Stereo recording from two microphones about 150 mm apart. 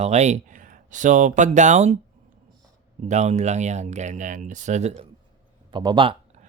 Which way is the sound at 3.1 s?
50° right (ahead or behind).